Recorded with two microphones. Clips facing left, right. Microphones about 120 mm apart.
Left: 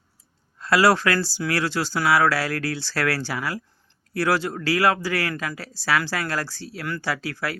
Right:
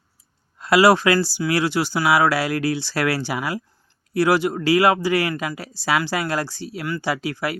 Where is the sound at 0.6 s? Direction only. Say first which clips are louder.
Right 4 dB; 15° right (ahead or behind).